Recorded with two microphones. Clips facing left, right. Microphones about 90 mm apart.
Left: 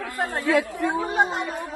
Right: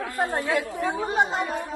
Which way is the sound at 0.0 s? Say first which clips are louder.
Even; 20° right (ahead or behind).